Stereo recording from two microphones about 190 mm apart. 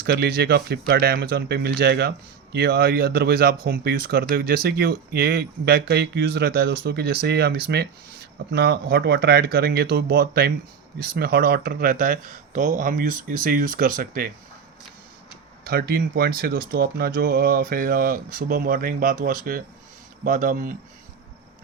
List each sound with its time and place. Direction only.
0.0 s speech: 55° right (ahead or behind)
15.6 s speech: 55° right (ahead or behind)